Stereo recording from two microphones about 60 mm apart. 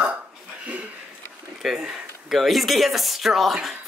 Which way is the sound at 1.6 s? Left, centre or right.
Centre.